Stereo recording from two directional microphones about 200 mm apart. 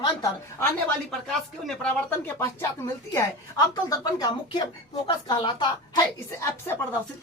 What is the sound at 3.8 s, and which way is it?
Speech, 20° left (ahead or behind).